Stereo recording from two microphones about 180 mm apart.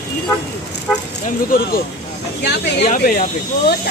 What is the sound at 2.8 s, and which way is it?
Speech, 45° left (ahead or behind).